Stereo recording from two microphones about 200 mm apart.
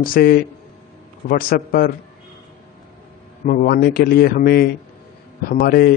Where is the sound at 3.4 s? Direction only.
45° left (ahead or behind).